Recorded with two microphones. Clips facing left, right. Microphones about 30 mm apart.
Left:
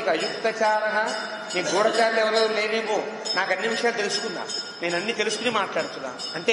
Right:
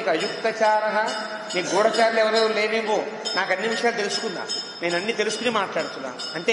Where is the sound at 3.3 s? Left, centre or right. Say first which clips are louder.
Right 1 dB; centre.